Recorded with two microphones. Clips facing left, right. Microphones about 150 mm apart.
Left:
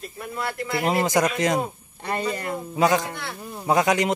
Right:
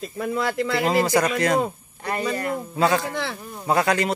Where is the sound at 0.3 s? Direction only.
85° right.